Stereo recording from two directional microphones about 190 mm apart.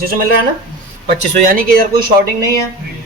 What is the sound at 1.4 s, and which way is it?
Speech, 45° right (ahead or behind).